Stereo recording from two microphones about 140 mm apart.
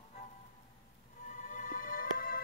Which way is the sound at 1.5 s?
70° left (ahead or behind).